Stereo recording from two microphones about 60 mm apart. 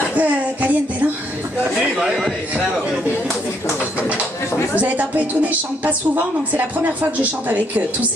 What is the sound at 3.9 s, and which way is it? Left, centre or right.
Speech, right.